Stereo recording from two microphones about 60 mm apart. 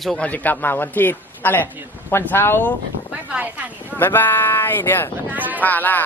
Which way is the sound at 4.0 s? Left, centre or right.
Left.